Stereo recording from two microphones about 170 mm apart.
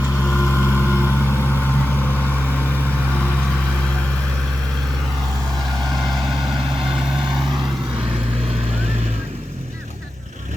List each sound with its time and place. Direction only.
0.0 s vehicle: 15° left (ahead or behind)
6.0 s vehicle: centre (ahead or behind)